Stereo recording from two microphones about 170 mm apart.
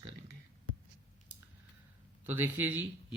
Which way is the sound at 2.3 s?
10° right (ahead or behind).